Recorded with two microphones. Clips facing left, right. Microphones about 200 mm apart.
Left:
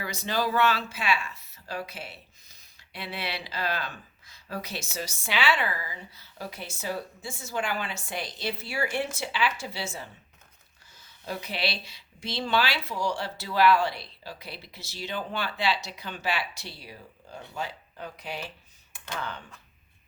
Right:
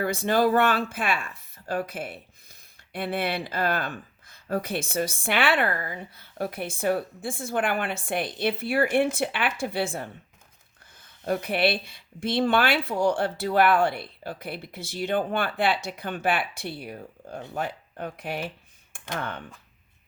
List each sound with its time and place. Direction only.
0.0 s speech: 55° right (ahead or behind)